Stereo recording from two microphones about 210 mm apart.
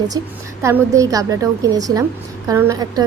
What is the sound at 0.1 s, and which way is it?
A woman's voice, 20° right (ahead or behind).